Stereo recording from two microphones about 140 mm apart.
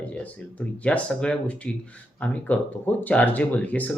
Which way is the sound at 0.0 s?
10° left (ahead or behind).